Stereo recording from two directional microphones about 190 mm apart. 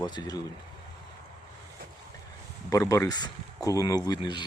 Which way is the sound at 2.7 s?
15° left (ahead or behind).